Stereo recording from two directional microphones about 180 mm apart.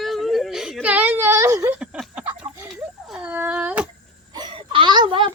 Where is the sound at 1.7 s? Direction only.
5° right (ahead or behind).